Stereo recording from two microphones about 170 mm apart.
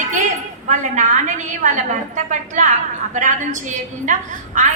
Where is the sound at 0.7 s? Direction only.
45° right (ahead or behind).